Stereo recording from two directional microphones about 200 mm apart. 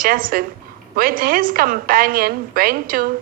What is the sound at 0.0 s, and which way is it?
A woman's voice, 45° right (ahead or behind).